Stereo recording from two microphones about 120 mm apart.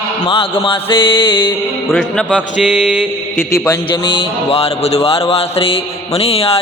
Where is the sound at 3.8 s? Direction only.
45° left (ahead or behind).